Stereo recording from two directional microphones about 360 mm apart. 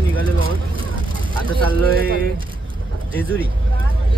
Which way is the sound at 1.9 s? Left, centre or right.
Right.